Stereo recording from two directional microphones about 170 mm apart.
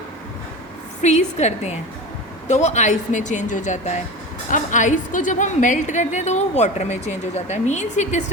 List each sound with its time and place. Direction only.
1.0 s a woman's voice: 40° left (ahead or behind)